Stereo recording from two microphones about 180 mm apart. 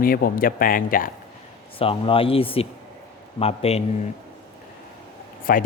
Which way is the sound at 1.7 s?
30° left (ahead or behind).